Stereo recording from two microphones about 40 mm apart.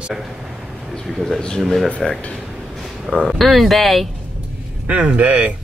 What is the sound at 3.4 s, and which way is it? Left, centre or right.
Speech, centre.